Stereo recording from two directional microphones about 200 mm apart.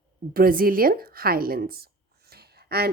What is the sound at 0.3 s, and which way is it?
A woman's voice, 45° right (ahead or behind).